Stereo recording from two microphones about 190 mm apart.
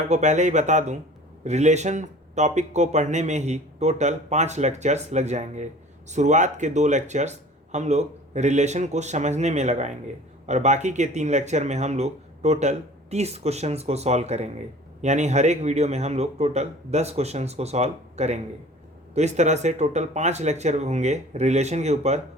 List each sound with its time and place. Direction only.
0.1 s speech: 40° right (ahead or behind)